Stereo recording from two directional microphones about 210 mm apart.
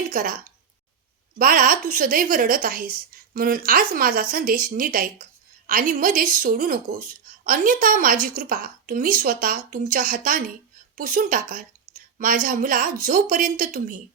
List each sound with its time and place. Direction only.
0.1 s speech: 40° right (ahead or behind)
1.4 s a woman's voice: 40° right (ahead or behind)